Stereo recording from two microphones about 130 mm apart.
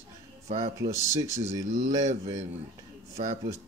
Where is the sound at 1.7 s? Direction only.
70° right (ahead or behind).